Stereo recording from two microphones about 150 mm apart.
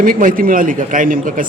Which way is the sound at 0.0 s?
65° right (ahead or behind).